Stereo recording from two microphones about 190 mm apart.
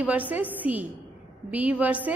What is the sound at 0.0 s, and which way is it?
A woman's voice, 10° right (ahead or behind).